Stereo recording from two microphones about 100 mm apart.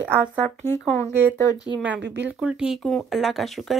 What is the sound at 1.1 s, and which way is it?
Speech, 20° right (ahead or behind).